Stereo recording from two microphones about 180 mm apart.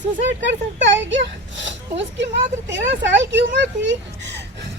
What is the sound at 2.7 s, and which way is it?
Speech, 90° right.